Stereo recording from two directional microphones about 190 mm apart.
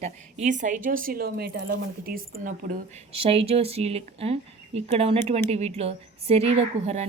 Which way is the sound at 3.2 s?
30° right (ahead or behind).